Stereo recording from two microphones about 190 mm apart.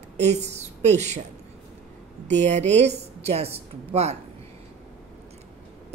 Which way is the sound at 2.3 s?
40° right (ahead or behind).